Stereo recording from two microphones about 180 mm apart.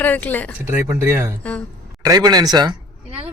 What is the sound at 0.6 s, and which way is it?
Speech, 15° right (ahead or behind).